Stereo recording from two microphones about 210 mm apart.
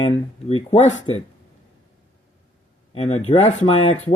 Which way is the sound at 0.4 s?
30° left (ahead or behind).